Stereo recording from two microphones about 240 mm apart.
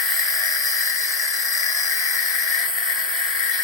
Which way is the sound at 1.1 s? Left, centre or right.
Centre.